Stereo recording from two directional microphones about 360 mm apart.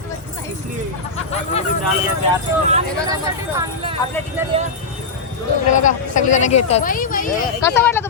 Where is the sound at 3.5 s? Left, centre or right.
Centre.